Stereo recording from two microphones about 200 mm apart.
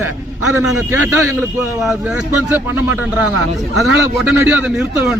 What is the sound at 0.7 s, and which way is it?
Speech, 90° right.